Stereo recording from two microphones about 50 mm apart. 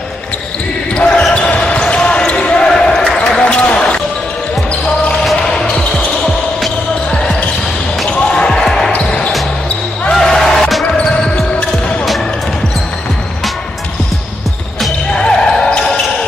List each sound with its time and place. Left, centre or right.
0.9 s basketball bounce: left
5.3 s basketball bounce: centre
8.1 s basketball bounce: centre
8.9 s basketball bounce: left
10.1 s music: centre
15.1 s basketball bounce: left